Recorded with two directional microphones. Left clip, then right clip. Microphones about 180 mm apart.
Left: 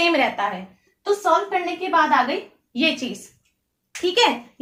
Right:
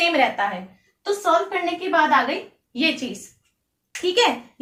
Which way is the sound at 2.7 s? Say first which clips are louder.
Left 1 dB; 15° left (ahead or behind).